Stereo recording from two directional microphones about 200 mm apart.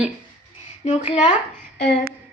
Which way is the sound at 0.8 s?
25° left (ahead or behind).